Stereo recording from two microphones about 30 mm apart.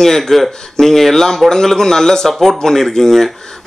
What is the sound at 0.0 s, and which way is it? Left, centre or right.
Speech, centre.